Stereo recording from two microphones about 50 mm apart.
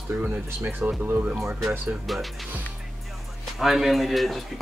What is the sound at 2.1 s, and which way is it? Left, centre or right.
Speech, centre.